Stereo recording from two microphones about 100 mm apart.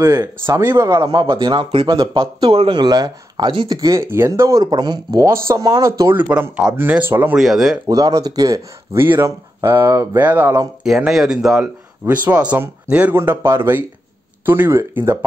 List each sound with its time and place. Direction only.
0.0 s speech: 35° right (ahead or behind)
1.2 s speech: 55° right (ahead or behind)
2.4 s speech: 65° right (ahead or behind)
2.8 s speech: 45° right (ahead or behind)
4.0 s speech: 25° right (ahead or behind); by 5.2 s 40° right (ahead or behind)
5.2 s speech: 30° right (ahead or behind)
6.1 s speech: 20° right (ahead or behind)
7.3 s speech: 5° right (ahead or behind)
7.9 s speech: 35° right (ahead or behind)
8.9 s speech: 25° right (ahead or behind)
10.8 s speech: 5° right (ahead or behind)
13.1 s speech: 25° right (ahead or behind)